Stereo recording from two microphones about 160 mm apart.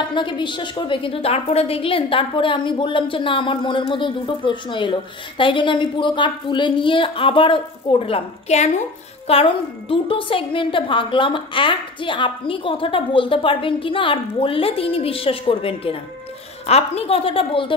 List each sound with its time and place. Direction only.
0.1 s a woman's voice: 30° left (ahead or behind)